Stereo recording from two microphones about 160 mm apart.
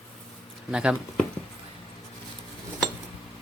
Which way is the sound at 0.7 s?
5° right (ahead or behind).